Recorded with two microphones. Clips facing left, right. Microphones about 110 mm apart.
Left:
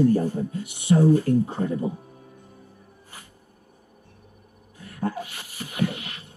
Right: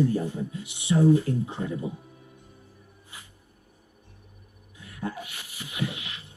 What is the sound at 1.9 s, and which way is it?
Music, 30° left (ahead or behind).